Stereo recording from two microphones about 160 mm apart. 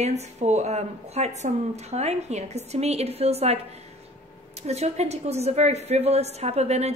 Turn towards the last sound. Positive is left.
turn(degrees=-40)  # may be behind; listen again after turning